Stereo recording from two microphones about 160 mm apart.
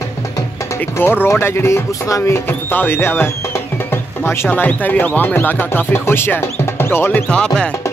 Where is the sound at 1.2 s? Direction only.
15° left (ahead or behind).